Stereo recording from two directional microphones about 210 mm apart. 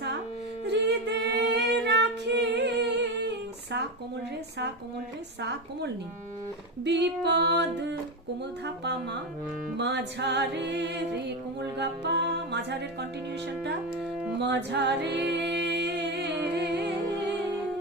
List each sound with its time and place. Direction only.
0.6 s female singing: 55° right (ahead or behind)
5.4 s a woman's voice: 55° right (ahead or behind)
6.8 s music: 55° right (ahead or behind)
14.0 s music: 5° right (ahead or behind)
14.3 s music: 55° right (ahead or behind)